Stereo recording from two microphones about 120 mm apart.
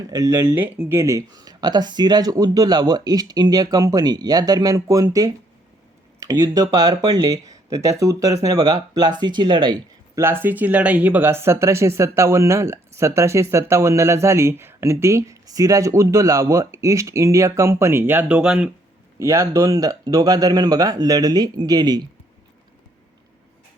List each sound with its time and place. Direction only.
0.1 s speech: 25° right (ahead or behind)
10.2 s speech: 20° right (ahead or behind)
19.2 s speech: 25° right (ahead or behind)